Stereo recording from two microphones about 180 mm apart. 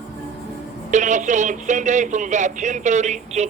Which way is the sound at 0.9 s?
40° right (ahead or behind).